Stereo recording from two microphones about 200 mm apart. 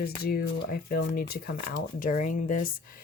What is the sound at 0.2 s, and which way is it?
Speech, 50° left (ahead or behind).